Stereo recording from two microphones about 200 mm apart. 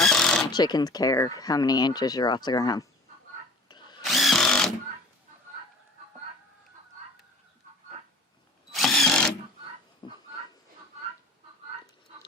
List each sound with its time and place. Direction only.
0.0 s a sound: 5° left (ahead or behind)
0.5 s speech: 20° left (ahead or behind)
3.7 s drill: 20° left (ahead or behind)
4.0 s drill: centre (ahead or behind)
8.7 s drill: centre (ahead or behind)
10.0 s fowl: 20° left (ahead or behind)